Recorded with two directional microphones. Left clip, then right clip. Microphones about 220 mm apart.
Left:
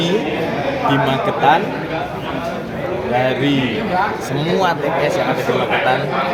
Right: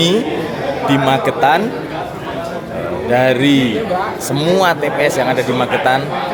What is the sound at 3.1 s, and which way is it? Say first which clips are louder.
A man's voice: right 5 dB; 55° right (ahead or behind).